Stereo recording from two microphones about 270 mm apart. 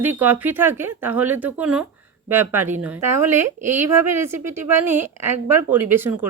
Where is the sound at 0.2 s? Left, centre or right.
Centre.